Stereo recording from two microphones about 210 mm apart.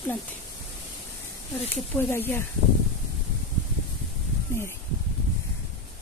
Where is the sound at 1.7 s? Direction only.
10° left (ahead or behind).